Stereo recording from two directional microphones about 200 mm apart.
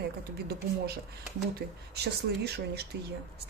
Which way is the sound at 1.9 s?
55° right (ahead or behind).